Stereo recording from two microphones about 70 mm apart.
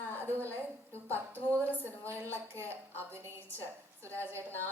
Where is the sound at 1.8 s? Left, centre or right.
Right.